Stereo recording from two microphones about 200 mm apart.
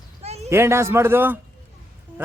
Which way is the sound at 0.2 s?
30° right (ahead or behind).